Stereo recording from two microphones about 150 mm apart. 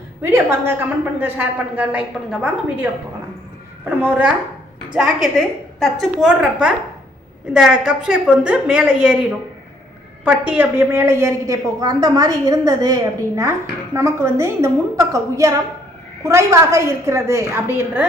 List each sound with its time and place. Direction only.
0.2 s a woman's voice: 15° right (ahead or behind)
3.8 s a woman's voice: 10° right (ahead or behind)
10.2 s a woman's voice: 10° right (ahead or behind)